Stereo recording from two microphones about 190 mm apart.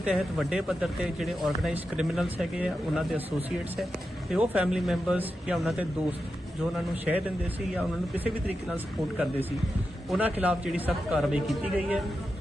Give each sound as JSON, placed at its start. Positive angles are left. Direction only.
{"t": 0.0, "sound": "speech", "side_deg": 0}
{"t": 4.3, "sound": "speech", "side_deg": -5}